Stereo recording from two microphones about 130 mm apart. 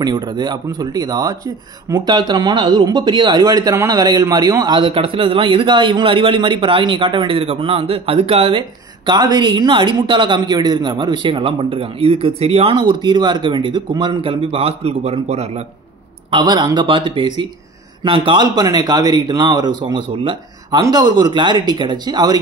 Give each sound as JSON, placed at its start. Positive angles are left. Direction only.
{"t": 0.0, "sound": "speech", "side_deg": -35}
{"t": 16.3, "sound": "speech", "side_deg": -35}